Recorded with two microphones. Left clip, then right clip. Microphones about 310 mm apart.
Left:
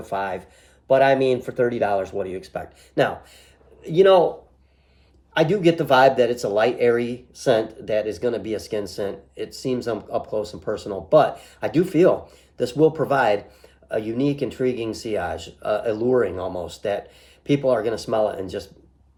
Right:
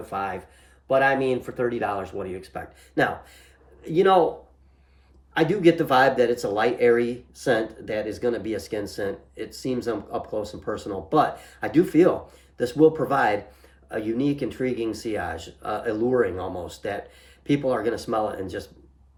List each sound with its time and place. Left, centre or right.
0.0 s speech: centre
5.3 s speech: centre